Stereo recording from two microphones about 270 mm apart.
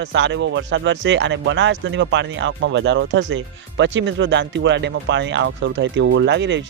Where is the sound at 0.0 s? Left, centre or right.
Right.